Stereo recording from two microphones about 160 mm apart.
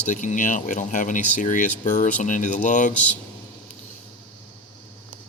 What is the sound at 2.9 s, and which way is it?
Speech, 10° left (ahead or behind).